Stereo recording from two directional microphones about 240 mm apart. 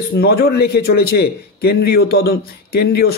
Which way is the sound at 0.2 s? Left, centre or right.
Left.